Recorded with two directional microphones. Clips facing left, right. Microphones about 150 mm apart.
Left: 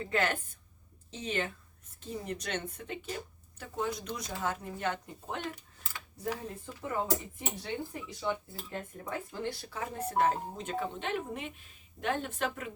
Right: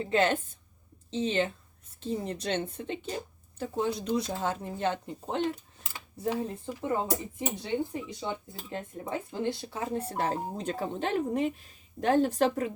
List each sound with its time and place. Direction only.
0.0 s cutlery: 25° right (ahead or behind)
8.2 s speech: 20° right (ahead or behind)